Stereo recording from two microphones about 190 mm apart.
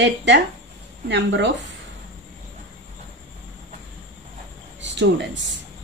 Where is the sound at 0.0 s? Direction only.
70° right (ahead or behind).